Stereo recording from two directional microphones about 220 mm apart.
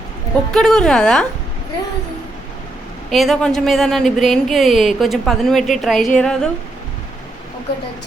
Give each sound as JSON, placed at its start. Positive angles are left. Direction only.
{"t": 0.5, "sound": "speech", "side_deg": 0}
{"t": 3.1, "sound": "speech", "side_deg": 0}